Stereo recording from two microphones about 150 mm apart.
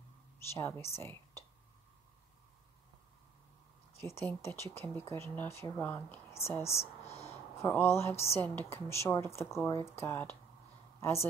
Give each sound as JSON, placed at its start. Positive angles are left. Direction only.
{"t": 0.6, "sound": "speech", "side_deg": 15}
{"t": 4.0, "sound": "speech", "side_deg": 15}
{"t": 7.1, "sound": "a sound", "side_deg": 45}
{"t": 7.5, "sound": "a woman's voice", "side_deg": 15}